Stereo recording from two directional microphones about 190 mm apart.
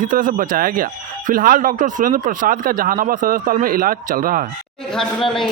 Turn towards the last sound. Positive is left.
turn(degrees=0)  # may be behind; listen again after turning